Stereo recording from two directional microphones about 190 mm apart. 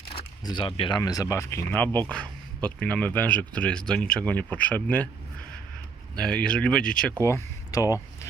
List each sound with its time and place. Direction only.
0.1 s speech: 25° left (ahead or behind); by 5.0 s 10° left (ahead or behind)
6.1 s speech: 5° left (ahead or behind)